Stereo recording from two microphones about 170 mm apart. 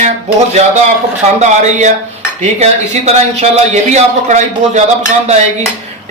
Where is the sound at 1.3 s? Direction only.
45° right (ahead or behind).